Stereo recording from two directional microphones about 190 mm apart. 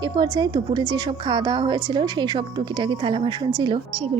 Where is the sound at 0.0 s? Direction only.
20° right (ahead or behind).